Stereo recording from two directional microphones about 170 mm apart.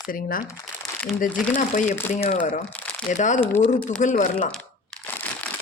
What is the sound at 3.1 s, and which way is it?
Speech, 45° left (ahead or behind).